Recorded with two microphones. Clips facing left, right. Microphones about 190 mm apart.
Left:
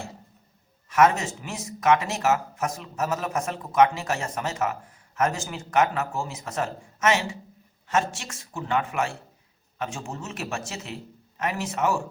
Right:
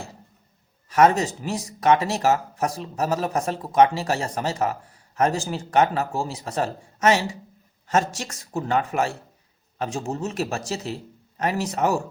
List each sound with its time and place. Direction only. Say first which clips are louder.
0.9 s speech: right 3 dB; 35° right (ahead or behind)